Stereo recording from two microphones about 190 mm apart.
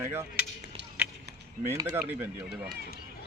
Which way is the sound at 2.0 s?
10° right (ahead or behind).